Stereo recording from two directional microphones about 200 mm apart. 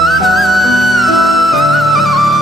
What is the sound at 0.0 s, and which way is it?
Music, centre (ahead or behind).